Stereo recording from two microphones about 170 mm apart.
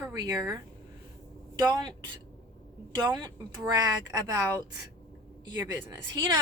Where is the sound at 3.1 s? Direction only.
25° right (ahead or behind).